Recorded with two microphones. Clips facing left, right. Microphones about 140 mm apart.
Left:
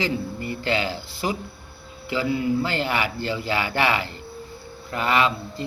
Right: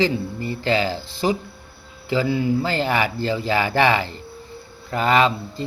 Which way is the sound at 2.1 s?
35° right (ahead or behind).